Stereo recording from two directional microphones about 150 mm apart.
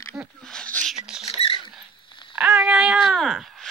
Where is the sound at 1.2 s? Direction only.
40° left (ahead or behind).